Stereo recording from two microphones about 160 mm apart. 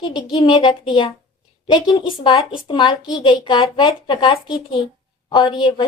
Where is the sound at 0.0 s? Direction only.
35° left (ahead or behind).